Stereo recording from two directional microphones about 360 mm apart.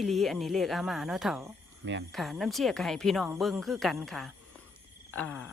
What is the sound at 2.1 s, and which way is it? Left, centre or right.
Speech, centre.